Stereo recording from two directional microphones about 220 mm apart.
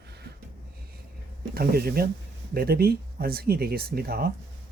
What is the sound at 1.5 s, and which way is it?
Speech, 45° right (ahead or behind).